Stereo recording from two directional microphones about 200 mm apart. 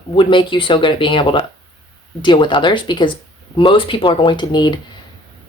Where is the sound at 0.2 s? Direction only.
25° left (ahead or behind).